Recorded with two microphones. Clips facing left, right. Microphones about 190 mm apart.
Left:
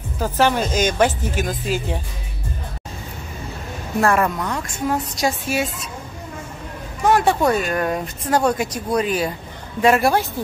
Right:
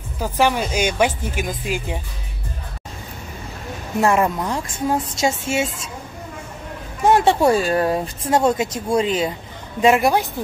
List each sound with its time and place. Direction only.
0.2 s speech: 10° right (ahead or behind)
4.0 s speech: 20° right (ahead or behind)
7.1 s speech: 25° right (ahead or behind)